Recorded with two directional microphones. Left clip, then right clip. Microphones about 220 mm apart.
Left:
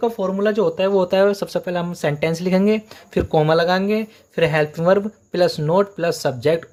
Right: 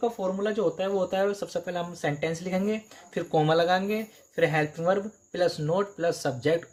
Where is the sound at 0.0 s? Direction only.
40° left (ahead or behind).